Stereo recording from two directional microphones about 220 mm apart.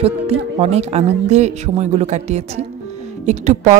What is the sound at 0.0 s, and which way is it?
Speech, 30° right (ahead or behind).